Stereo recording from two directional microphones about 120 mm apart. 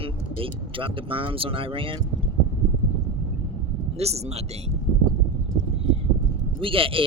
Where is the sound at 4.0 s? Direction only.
60° right (ahead or behind).